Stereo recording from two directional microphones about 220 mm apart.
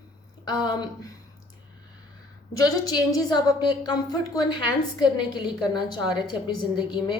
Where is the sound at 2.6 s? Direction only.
15° left (ahead or behind).